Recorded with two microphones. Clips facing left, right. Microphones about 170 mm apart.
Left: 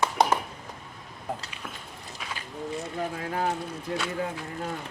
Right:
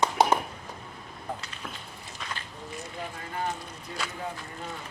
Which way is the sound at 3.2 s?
75° left (ahead or behind).